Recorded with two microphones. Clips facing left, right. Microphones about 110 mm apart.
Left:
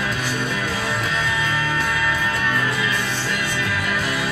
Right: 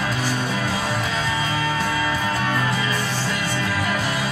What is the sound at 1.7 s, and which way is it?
Music, 35° right (ahead or behind).